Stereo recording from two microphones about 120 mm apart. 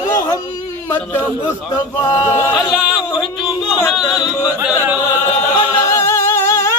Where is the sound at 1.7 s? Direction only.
30° left (ahead or behind).